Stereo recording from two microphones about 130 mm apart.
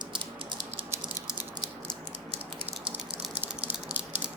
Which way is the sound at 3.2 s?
10° right (ahead or behind).